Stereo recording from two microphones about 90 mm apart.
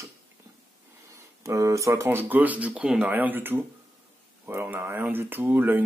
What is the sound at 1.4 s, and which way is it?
Speech, 35° right (ahead or behind).